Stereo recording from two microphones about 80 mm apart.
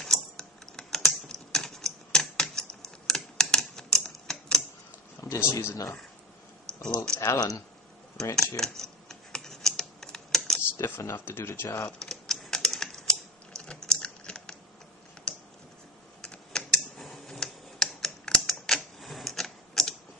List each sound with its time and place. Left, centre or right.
0.0 s typing: centre
3.1 s typewriter: centre
5.5 s speech: left
6.7 s a sound: centre
7.2 s speech: left
8.4 s typing: centre
10.8 s speech: left
11.8 s typewriter: centre
16.2 s typing: centre